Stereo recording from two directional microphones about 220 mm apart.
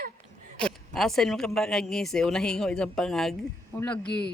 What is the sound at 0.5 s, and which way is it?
Speech, 5° left (ahead or behind).